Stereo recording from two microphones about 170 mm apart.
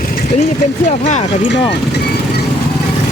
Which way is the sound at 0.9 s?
40° left (ahead or behind).